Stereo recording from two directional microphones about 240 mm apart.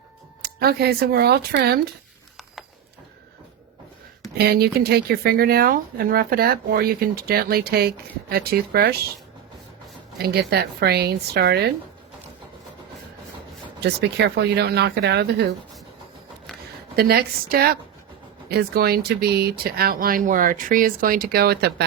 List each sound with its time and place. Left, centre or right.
0.4 s speech: right
4.4 s speech: right
10.2 s speech: right
13.8 s speech: right
16.9 s speech: right